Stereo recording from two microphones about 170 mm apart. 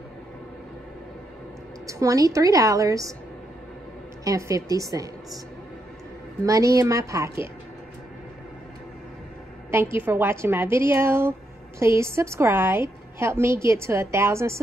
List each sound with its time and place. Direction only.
1.9 s a woman's voice: 20° right (ahead or behind)
4.2 s a woman's voice: 20° right (ahead or behind)
6.4 s a woman's voice: 20° right (ahead or behind)
9.7 s a woman's voice: 15° right (ahead or behind)